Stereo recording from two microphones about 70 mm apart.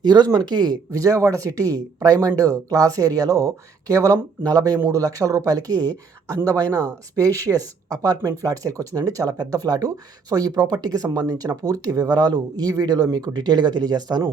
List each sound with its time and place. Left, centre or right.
0.0 s speech: right
0.9 s speech: right
8.2 s speech: right